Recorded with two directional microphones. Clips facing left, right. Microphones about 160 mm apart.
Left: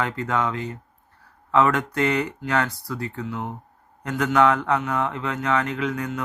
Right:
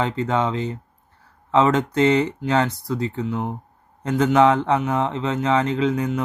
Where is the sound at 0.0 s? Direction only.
25° right (ahead or behind).